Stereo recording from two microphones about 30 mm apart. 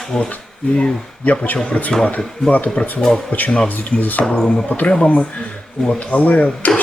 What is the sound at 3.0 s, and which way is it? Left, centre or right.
Speech, centre.